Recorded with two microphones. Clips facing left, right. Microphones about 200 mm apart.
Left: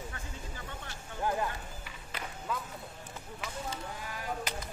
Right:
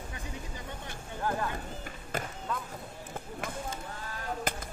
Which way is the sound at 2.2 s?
45° right (ahead or behind).